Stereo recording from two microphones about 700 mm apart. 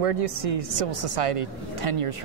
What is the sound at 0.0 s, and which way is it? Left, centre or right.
A woman's voice, right.